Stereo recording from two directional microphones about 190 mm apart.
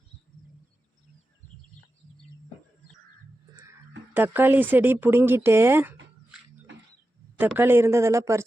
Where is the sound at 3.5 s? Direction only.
15° right (ahead or behind).